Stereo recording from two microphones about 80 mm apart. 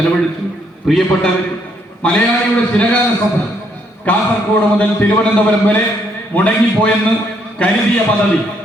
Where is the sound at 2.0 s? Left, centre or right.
Centre.